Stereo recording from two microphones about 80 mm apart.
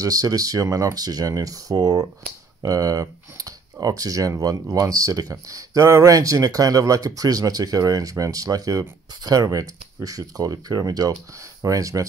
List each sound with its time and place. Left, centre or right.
0.0 s speech: right
11.6 s speech: right